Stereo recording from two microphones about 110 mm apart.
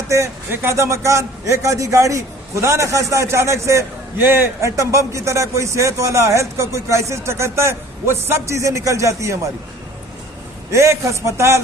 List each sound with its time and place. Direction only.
0.1 s a man's voice: 25° right (ahead or behind)
10.7 s a man's voice: 25° right (ahead or behind)